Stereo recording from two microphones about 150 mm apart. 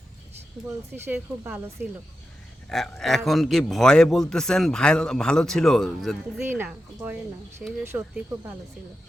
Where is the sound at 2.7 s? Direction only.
Centre (ahead or behind).